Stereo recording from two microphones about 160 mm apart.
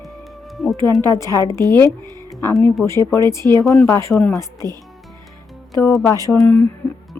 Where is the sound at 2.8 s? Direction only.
Centre (ahead or behind).